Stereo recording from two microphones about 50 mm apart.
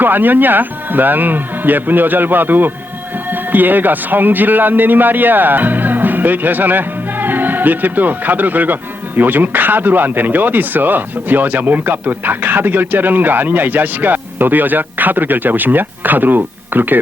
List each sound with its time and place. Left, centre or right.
0.0 s a man's voice: right